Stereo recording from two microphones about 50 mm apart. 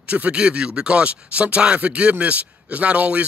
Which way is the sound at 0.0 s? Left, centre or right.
Right.